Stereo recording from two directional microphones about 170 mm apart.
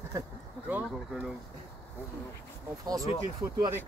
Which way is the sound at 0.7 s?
10° right (ahead or behind).